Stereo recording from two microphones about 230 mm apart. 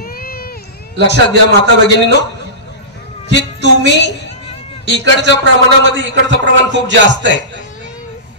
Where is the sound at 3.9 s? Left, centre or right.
Left.